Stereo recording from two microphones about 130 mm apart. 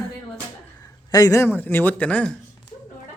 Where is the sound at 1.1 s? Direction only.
30° left (ahead or behind); by 2.3 s 10° left (ahead or behind).